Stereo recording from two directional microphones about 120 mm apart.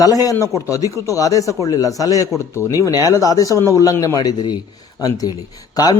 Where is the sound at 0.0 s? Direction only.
30° left (ahead or behind).